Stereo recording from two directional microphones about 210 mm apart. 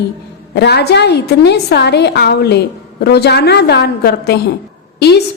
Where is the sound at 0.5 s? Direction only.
55° left (ahead or behind).